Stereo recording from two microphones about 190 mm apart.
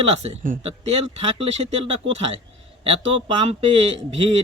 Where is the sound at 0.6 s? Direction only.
30° right (ahead or behind).